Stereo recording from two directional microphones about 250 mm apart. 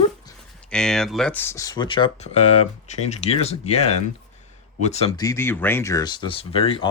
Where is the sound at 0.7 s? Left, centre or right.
Centre.